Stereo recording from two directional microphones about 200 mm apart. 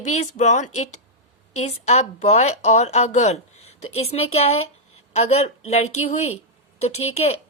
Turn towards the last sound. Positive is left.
turn(degrees=30)  # may be behind; listen again after turning